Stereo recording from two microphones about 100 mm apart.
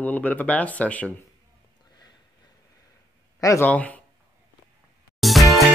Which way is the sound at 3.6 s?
15° left (ahead or behind).